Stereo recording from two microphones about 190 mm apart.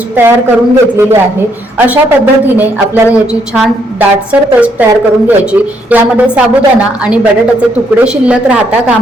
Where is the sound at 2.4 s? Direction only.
10° right (ahead or behind).